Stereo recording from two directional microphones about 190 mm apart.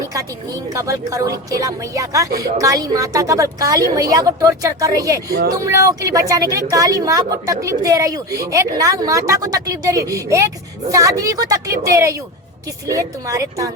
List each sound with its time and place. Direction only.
0.0 s a woman's voice: 20° right (ahead or behind)
5.3 s speech: 55° right (ahead or behind)
5.6 s a woman's voice: 15° right (ahead or behind)